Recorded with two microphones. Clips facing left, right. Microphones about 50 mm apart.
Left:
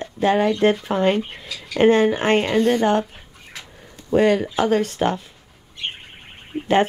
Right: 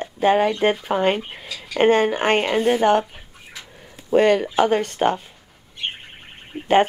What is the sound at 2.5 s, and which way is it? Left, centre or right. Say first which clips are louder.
Speech: left 1 dB; centre.